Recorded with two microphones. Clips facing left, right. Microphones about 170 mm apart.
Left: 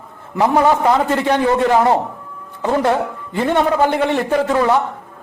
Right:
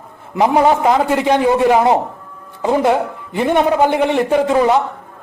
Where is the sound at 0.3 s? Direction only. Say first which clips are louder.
Right 1 dB; 15° right (ahead or behind).